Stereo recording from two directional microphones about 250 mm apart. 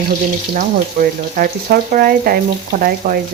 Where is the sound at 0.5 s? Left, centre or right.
Right.